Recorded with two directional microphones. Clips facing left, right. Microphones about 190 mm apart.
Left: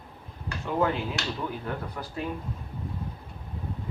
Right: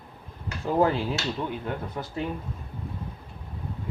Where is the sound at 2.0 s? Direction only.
25° right (ahead or behind).